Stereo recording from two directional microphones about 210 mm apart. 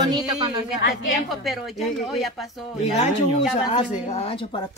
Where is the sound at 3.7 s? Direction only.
30° left (ahead or behind).